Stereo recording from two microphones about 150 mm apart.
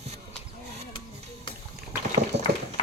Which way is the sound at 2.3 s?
45° right (ahead or behind).